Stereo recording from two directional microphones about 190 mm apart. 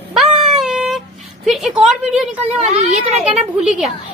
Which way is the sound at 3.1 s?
35° right (ahead or behind).